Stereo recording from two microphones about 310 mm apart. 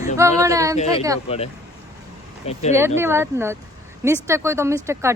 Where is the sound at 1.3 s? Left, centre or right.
Centre.